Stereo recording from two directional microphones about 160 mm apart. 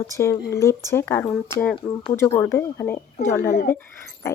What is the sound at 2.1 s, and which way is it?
A woman's voice, 20° left (ahead or behind).